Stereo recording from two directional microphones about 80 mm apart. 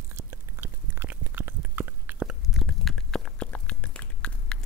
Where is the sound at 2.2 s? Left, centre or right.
Centre.